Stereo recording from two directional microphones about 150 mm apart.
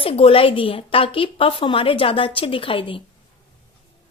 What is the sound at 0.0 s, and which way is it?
A woman's voice, 35° left (ahead or behind).